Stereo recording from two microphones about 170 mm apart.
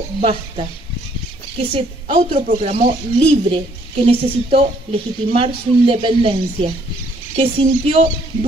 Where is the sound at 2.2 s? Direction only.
50° right (ahead or behind).